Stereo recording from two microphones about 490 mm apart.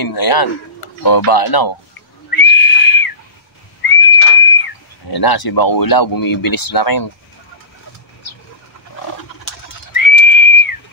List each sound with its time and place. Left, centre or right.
0.0 s speech: left
2.3 s a sound: left
3.8 s whistling: left
9.9 s whistle: left